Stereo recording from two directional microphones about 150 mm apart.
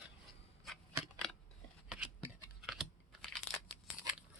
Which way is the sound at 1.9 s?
5° right (ahead or behind).